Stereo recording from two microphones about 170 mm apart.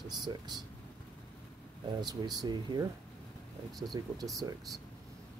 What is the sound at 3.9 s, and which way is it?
Speech, 20° right (ahead or behind).